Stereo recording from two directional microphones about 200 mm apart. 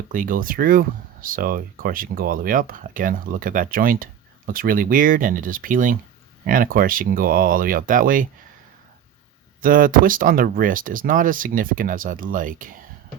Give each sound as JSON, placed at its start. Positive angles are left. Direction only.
{"t": 0.1, "sound": "speech", "side_deg": -45}
{"t": 9.6, "sound": "speech", "side_deg": -45}